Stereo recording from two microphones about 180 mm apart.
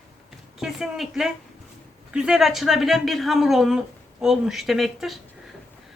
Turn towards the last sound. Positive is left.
turn(degrees=0)  # may be behind; listen again after turning